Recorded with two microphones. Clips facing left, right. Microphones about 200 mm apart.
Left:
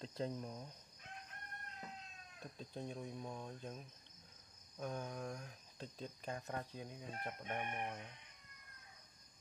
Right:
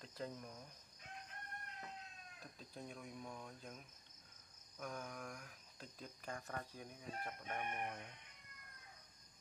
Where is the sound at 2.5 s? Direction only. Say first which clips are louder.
Left 6 dB; 25° left (ahead or behind).